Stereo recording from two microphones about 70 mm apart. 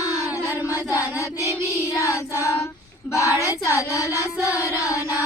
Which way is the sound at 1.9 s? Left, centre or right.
Left.